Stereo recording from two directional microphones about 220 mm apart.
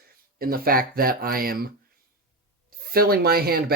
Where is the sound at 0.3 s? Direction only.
40° right (ahead or behind).